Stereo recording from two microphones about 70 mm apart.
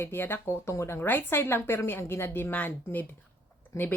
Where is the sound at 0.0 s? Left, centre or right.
Left.